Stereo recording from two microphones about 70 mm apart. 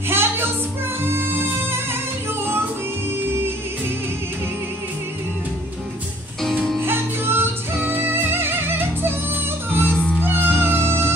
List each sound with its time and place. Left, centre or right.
0.1 s music: right
6.8 s music: right